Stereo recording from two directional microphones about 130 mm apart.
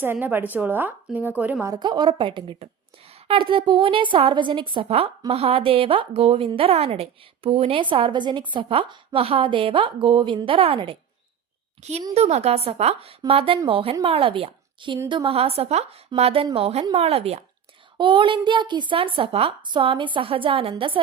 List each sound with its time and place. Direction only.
0.0 s a woman's voice: 15° right (ahead or behind)
1.6 s a woman's voice: 30° right (ahead or behind)
11.8 s a child's voice: 55° right (ahead or behind)
17.9 s a woman's voice: 40° right (ahead or behind)